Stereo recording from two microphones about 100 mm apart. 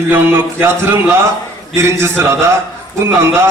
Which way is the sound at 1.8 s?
30° right (ahead or behind).